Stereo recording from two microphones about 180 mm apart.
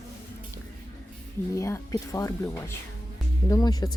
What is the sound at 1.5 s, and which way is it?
Speech, 15° left (ahead or behind).